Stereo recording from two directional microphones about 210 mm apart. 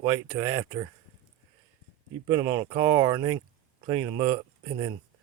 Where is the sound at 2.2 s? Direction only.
20° right (ahead or behind).